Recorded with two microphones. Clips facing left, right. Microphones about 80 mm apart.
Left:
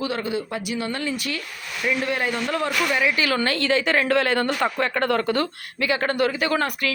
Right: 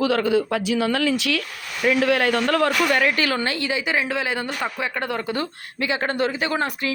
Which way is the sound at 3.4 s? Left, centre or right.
Centre.